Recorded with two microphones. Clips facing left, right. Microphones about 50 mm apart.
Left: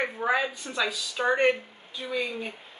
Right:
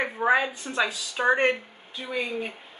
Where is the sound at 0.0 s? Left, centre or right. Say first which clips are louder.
Right 3 dB; centre.